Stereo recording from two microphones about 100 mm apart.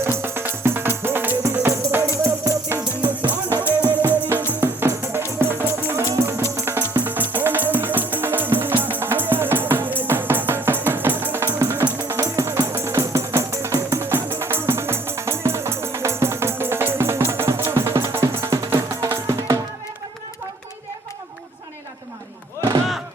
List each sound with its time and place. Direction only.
0.0 s music: 25° right (ahead or behind)
3.8 s music: 20° right (ahead or behind)